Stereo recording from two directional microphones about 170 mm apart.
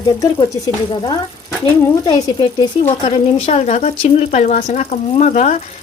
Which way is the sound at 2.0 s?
25° left (ahead or behind).